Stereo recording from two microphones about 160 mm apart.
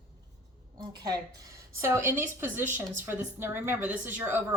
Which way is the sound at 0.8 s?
25° right (ahead or behind).